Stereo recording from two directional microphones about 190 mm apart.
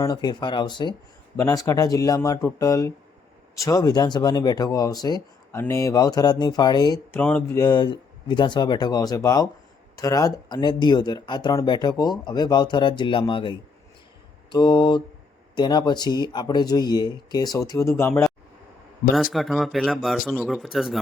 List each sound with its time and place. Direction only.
0.0 s speech: 20° left (ahead or behind)
7.2 s speech: 5° left (ahead or behind)
7.6 s speech: 20° left (ahead or behind)
19.1 s speech: centre (ahead or behind)